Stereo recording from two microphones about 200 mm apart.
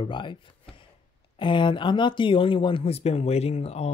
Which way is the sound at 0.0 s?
25° left (ahead or behind).